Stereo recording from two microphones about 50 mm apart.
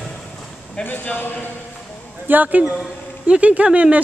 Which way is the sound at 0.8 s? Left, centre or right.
Left.